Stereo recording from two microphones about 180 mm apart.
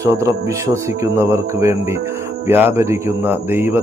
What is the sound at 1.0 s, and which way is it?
Speech, 15° right (ahead or behind).